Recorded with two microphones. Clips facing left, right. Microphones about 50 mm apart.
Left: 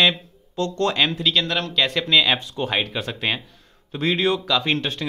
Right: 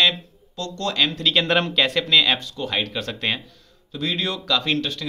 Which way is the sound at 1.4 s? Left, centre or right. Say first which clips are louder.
Right 5 dB; right.